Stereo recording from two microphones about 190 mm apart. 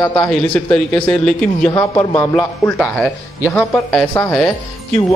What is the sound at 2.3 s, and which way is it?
Speech, 5° left (ahead or behind).